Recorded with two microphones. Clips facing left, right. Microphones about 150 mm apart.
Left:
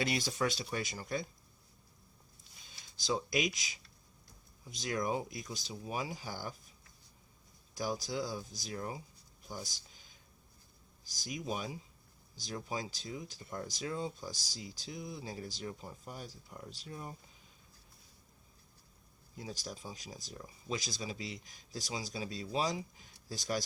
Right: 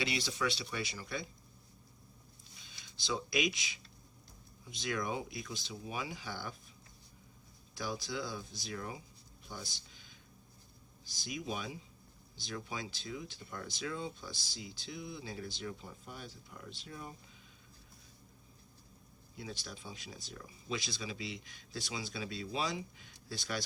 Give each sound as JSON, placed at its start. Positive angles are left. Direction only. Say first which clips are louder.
{"t": 0.0, "sound": "speech", "louder": "left 2 dB", "side_deg": 45}
{"t": 2.6, "sound": "speech", "louder": "left 3 dB", "side_deg": 40}
{"t": 7.8, "sound": "speech", "louder": "left 3 dB", "side_deg": 40}
{"t": 9.5, "sound": "a sound", "louder": "left 2 dB", "side_deg": 40}
{"t": 11.0, "sound": "speech", "louder": "even", "side_deg": 40}
{"t": 19.4, "sound": "speech", "louder": "left 2 dB", "side_deg": 40}